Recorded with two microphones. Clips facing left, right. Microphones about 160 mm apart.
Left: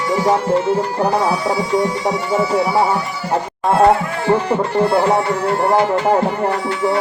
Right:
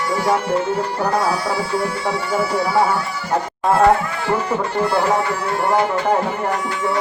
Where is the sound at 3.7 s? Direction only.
25° left (ahead or behind).